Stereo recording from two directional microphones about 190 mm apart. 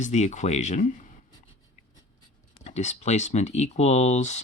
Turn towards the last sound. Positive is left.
turn(degrees=35)  # may be behind; listen again after turning